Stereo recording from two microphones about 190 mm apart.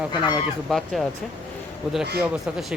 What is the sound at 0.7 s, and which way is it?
Speech, centre (ahead or behind).